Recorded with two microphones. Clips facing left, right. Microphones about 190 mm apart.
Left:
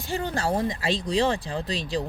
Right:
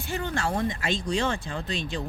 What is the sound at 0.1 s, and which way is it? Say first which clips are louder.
Speech: left 3 dB; 35° left (ahead or behind).